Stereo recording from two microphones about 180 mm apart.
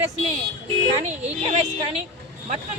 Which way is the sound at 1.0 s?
40° right (ahead or behind).